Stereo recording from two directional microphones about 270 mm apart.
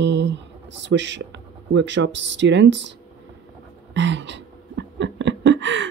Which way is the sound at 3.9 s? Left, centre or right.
Right.